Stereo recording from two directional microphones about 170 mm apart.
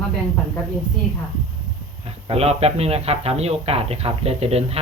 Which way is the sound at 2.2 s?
35° right (ahead or behind).